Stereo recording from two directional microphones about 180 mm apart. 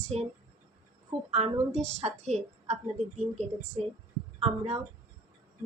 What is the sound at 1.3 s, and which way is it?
A woman's voice, 35° right (ahead or behind).